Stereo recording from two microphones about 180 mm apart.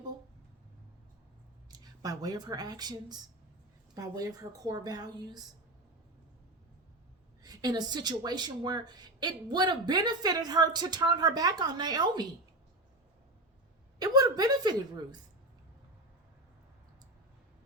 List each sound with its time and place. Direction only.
1.7 s speech: 20° right (ahead or behind)
7.4 s speech: 20° right (ahead or behind)
14.0 s speech: 20° right (ahead or behind)